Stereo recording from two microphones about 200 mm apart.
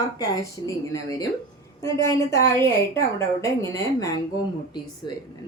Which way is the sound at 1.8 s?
15° left (ahead or behind).